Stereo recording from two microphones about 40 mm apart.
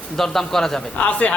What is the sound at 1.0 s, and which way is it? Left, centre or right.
Speech, left.